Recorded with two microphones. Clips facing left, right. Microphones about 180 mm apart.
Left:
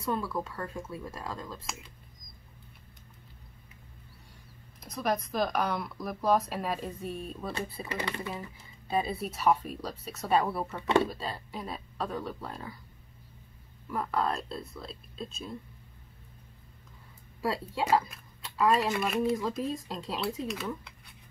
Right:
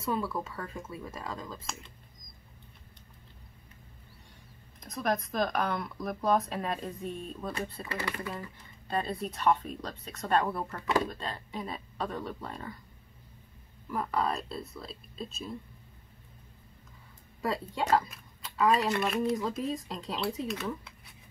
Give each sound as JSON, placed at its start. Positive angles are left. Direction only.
{"t": 0.0, "sound": "speech", "side_deg": 0}
{"t": 4.7, "sound": "speech", "side_deg": 0}
{"t": 7.9, "sound": "speech", "side_deg": 20}
{"t": 8.3, "sound": "speech", "side_deg": 5}
{"t": 13.8, "sound": "speech", "side_deg": 0}
{"t": 17.4, "sound": "speech", "side_deg": 5}